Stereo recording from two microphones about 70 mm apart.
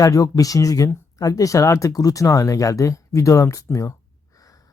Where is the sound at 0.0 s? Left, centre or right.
Left.